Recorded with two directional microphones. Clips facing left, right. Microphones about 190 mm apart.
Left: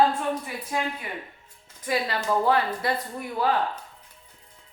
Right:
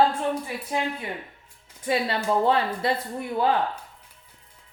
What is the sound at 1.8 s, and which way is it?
A woman's voice, 25° right (ahead or behind).